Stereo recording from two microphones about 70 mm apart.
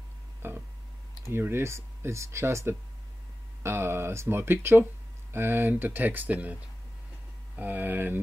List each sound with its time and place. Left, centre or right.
0.4 s a sound: right
1.3 s speech: right
7.5 s speech: right